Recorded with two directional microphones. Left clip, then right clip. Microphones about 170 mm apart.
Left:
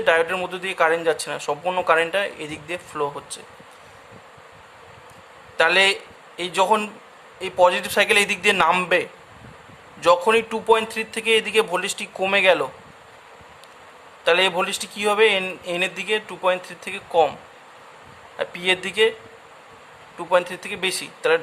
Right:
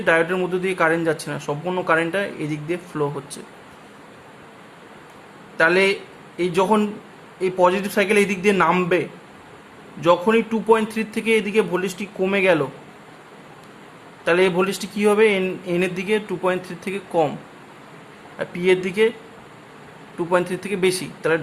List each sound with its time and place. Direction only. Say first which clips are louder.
0.0 s a man's voice: right 1 dB; 20° left (ahead or behind)
5.5 s a man's voice: even; 25° left (ahead or behind)
14.3 s speech: even; 20° left (ahead or behind)
18.3 s a man's voice: right 2 dB; 20° left (ahead or behind)
20.1 s speech: even; 15° left (ahead or behind)